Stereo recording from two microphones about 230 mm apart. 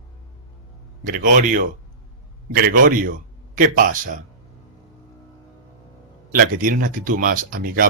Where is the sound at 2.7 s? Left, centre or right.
Right.